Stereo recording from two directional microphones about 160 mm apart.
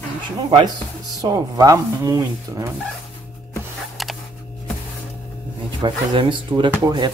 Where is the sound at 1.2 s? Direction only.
25° right (ahead or behind).